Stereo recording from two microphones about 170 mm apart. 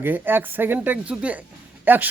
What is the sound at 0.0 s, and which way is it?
Speech, 10° right (ahead or behind).